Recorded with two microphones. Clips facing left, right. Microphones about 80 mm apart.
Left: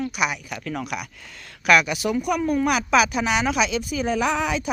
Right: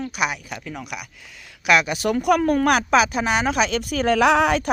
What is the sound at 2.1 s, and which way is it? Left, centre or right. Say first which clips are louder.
Speech: right 5 dB; right.